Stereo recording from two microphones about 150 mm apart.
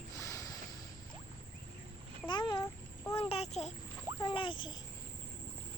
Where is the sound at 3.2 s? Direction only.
40° left (ahead or behind).